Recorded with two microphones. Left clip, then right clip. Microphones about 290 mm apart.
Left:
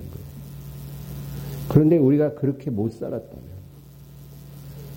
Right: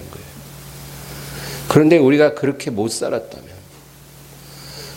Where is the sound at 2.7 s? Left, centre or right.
Right.